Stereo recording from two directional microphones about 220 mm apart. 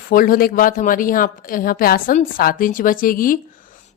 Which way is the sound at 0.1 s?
40° left (ahead or behind).